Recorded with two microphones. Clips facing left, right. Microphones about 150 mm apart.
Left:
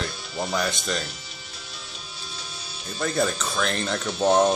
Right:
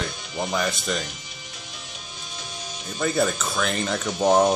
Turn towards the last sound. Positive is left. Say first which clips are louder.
# right 1 dB
turn(degrees=-15)  # may be behind; listen again after turning